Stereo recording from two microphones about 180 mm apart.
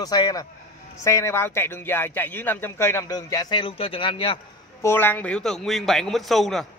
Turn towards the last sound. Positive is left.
turn(degrees=0)  # may be behind; listen again after turning